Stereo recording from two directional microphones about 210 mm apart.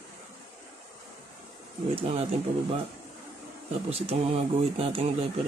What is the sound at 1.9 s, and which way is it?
Mantra, 25° right (ahead or behind).